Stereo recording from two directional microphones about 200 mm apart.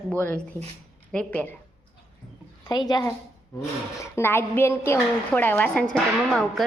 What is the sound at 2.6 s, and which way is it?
A woman's voice, 20° left (ahead or behind).